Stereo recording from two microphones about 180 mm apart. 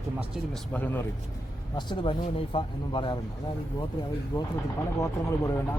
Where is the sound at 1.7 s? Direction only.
30° left (ahead or behind).